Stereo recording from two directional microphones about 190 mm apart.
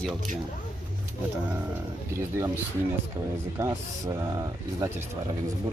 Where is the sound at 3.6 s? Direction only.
15° right (ahead or behind).